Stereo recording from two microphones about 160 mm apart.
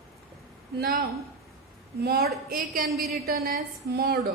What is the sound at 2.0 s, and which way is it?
Speech, 80° right.